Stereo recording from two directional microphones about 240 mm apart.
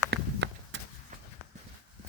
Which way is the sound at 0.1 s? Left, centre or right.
Right.